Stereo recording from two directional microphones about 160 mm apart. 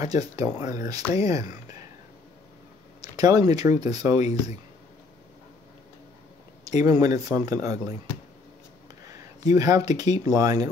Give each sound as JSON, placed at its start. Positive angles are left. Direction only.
{"t": 0.4, "sound": "speech", "side_deg": -25}
{"t": 3.0, "sound": "speech", "side_deg": -25}
{"t": 4.2, "sound": "speech", "side_deg": 45}
{"t": 6.8, "sound": "speech", "side_deg": -25}
{"t": 9.0, "sound": "speech", "side_deg": -20}